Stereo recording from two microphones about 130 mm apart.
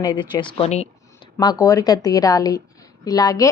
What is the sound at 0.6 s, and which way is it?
Speech, 55° left (ahead or behind).